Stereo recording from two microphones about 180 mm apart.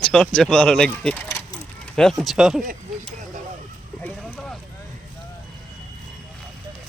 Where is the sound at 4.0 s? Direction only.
10° left (ahead or behind).